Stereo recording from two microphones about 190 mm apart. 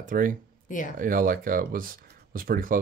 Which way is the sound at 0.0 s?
45° right (ahead or behind).